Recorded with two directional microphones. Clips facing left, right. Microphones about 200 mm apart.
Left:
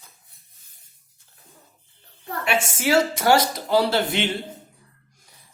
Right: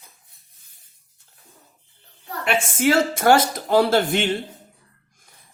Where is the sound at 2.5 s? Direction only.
50° right (ahead or behind).